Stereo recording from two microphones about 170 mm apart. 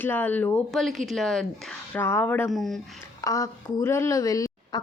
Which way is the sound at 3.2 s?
20° left (ahead or behind).